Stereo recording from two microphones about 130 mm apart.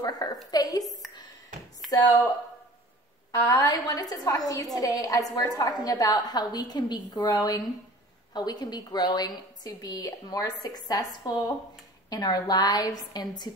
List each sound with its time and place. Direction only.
0.0 s a woman's voice: 30° left (ahead or behind)
1.8 s a sound: centre (ahead or behind)
3.3 s a woman's voice: 25° left (ahead or behind)